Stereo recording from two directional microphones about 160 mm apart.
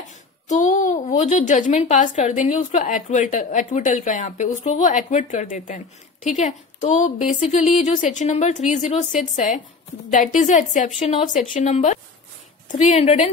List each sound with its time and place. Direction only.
0.5 s a woman's voice: 50° left (ahead or behind)